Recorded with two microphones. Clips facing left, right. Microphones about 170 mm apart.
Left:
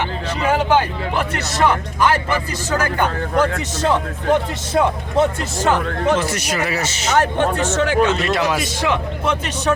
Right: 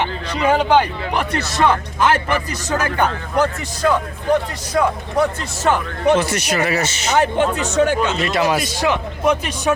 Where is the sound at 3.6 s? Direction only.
25° left (ahead or behind).